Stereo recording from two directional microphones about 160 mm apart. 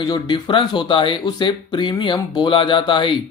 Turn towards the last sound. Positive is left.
turn(degrees=30)  # may be behind; listen again after turning